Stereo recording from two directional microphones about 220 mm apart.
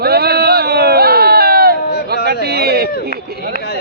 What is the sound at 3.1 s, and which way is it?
Speech, 45° right (ahead or behind).